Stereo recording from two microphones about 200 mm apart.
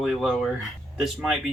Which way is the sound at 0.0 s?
Centre (ahead or behind).